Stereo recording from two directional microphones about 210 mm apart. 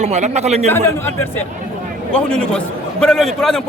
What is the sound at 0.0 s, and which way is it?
Speech, 30° right (ahead or behind).